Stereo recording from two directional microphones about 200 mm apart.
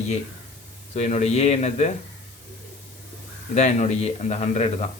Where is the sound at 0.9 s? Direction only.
35° left (ahead or behind).